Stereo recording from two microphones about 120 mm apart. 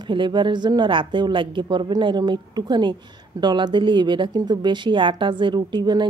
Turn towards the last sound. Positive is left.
turn(degrees=-35)  # may be behind; listen again after turning